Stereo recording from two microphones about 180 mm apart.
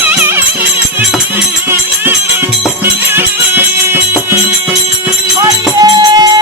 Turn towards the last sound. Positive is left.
turn(degrees=-20)  # may be behind; listen again after turning